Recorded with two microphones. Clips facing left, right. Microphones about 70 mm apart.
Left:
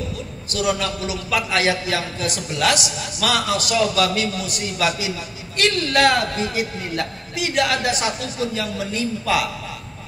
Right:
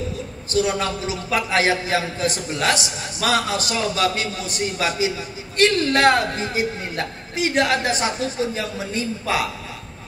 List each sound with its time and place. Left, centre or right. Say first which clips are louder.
0.5 s a man's voice: right 1 dB; right